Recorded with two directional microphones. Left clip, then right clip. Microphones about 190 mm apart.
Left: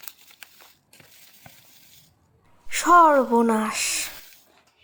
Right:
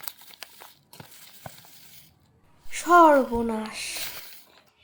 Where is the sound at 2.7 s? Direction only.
20° left (ahead or behind).